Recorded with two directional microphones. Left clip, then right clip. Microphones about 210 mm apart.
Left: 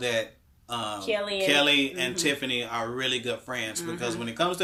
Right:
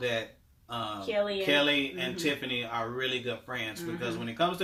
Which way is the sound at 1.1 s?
50° left (ahead or behind).